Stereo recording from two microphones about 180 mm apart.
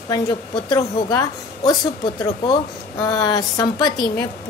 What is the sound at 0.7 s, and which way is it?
A woman's voice, 20° left (ahead or behind).